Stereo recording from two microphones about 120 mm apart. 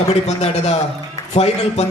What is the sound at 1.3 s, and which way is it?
Speech, 65° left (ahead or behind).